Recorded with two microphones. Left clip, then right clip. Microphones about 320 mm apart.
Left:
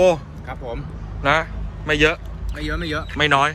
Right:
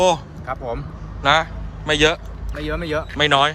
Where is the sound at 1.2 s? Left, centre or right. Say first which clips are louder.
Right 2 dB; centre.